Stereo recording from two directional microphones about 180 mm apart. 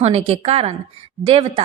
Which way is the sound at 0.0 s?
30° right (ahead or behind).